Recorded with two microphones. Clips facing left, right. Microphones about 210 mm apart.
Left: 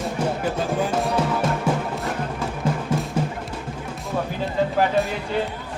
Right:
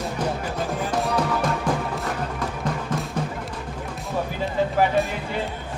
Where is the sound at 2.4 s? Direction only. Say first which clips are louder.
Left 2 dB; 5° left (ahead or behind).